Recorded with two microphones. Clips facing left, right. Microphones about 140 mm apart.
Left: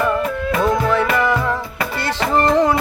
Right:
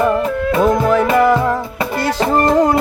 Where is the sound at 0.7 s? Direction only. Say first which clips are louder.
Right 4 dB; 45° right (ahead or behind).